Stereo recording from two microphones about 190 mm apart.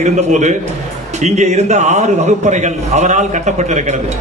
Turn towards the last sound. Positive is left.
turn(degrees=-40)  # may be behind; listen again after turning